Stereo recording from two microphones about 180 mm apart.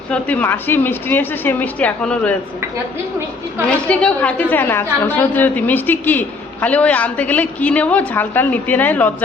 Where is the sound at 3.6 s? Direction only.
5° left (ahead or behind).